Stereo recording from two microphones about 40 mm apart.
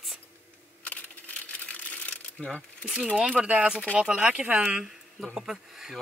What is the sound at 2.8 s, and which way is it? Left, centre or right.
Speech, right.